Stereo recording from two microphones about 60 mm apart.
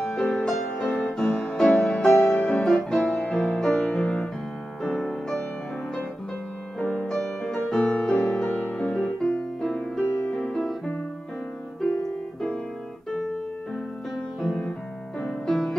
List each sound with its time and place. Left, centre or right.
0.0 s music: centre
6.8 s music: centre
7.8 s music: centre
8.5 s music: left
8.8 s music: centre
10.5 s music: centre
14.4 s music: centre